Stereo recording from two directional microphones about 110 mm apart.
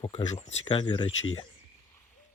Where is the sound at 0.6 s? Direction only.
50° left (ahead or behind).